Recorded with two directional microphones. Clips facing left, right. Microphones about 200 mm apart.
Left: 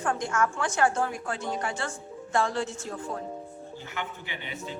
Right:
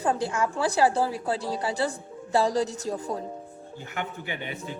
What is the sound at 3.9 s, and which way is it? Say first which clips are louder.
Speech: right 5 dB; 50° right (ahead or behind).